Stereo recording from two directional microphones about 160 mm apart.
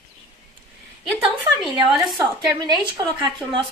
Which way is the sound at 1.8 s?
25° right (ahead or behind).